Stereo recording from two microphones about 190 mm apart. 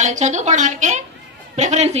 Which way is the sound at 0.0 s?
40° right (ahead or behind).